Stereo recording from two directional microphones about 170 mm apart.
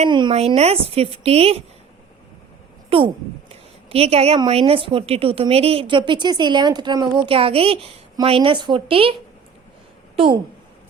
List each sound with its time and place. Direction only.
0.0 s a woman's voice: 30° right (ahead or behind)
2.9 s a woman's voice: 35° right (ahead or behind)
3.5 s a sound: 35° right (ahead or behind)
4.4 s a woman's voice: 35° right (ahead or behind)
10.2 s a woman's voice: 30° right (ahead or behind)